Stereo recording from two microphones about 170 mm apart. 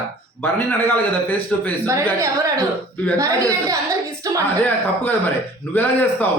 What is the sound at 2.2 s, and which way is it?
Speech, 20° right (ahead or behind).